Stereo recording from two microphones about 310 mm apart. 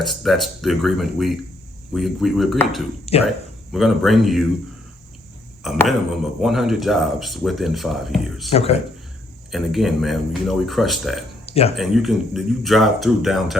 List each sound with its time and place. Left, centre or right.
0.0 s speech: centre
5.6 s speech: centre
8.5 s speech: centre
9.5 s speech: centre
11.4 s a sound: centre
11.8 s speech: centre